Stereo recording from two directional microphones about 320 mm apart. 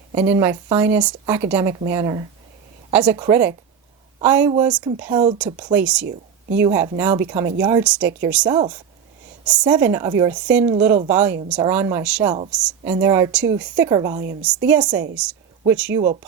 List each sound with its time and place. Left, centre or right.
0.2 s a woman's voice: centre